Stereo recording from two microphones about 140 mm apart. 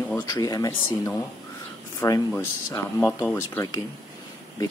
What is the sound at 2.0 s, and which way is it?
Speech, 20° left (ahead or behind).